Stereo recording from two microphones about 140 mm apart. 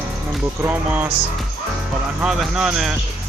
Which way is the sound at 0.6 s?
15° right (ahead or behind).